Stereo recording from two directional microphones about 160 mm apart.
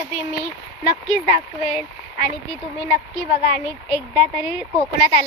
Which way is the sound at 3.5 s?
50° left (ahead or behind).